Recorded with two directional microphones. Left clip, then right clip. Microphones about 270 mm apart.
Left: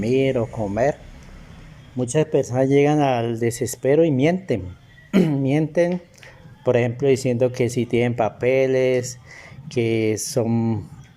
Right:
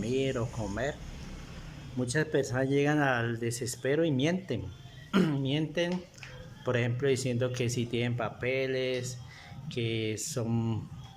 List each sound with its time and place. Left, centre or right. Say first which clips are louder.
0.2 s speech: left 11 dB; centre
2.1 s speech: left 10 dB; centre